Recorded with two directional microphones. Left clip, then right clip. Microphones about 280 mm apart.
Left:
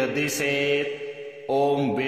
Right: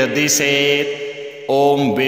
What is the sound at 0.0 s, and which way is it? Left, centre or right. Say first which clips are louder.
Mantra: right 9 dB; right.